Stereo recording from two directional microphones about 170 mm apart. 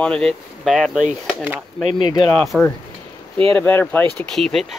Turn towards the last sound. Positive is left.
turn(degrees=0)  # may be behind; listen again after turning